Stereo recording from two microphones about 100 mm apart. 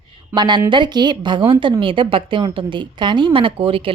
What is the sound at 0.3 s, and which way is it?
A woman's voice, 50° right (ahead or behind).